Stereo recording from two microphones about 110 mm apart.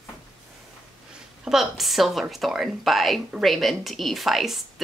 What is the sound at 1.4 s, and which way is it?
Speech, 5° right (ahead or behind).